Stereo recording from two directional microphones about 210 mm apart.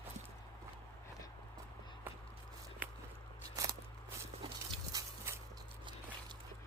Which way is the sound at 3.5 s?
15° right (ahead or behind).